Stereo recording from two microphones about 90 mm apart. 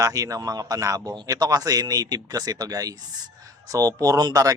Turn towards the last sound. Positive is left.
turn(degrees=-45)  # may be behind; listen again after turning